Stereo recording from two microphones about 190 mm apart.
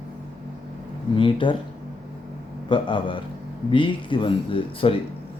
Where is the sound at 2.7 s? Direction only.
25° left (ahead or behind).